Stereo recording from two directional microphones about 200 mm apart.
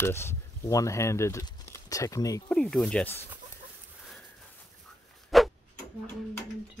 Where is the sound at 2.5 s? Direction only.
5° left (ahead or behind).